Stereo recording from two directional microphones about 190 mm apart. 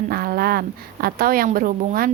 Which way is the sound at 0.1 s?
55° right (ahead or behind).